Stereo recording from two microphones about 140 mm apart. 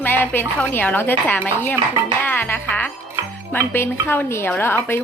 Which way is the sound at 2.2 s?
15° left (ahead or behind).